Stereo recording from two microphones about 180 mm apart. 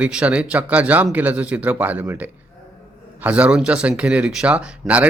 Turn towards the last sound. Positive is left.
turn(degrees=-5)  # may be behind; listen again after turning